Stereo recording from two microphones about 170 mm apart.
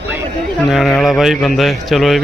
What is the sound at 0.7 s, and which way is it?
A man's voice, centre (ahead or behind).